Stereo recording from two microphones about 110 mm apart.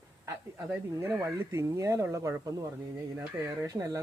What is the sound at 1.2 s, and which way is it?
Speech, 25° right (ahead or behind).